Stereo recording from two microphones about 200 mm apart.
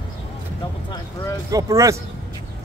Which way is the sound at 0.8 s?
20° left (ahead or behind).